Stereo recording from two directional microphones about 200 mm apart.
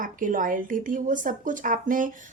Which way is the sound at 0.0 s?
40° right (ahead or behind).